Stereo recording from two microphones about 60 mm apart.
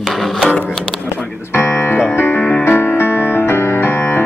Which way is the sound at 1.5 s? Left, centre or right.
Left.